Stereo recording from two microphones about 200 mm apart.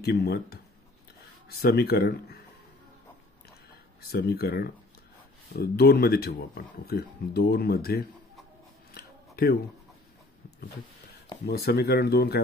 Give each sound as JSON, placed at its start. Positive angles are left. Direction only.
{"t": 0.0, "sound": "speech", "side_deg": 55}
{"t": 4.0, "sound": "speech", "side_deg": 50}
{"t": 8.9, "sound": "a sound", "side_deg": 50}
{"t": 11.4, "sound": "speech", "side_deg": 50}